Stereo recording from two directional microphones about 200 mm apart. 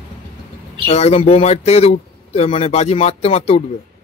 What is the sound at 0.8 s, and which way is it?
A man's voice, 30° left (ahead or behind).